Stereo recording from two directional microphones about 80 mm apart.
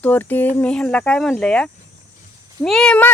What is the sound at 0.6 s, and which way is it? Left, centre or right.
Speech, centre.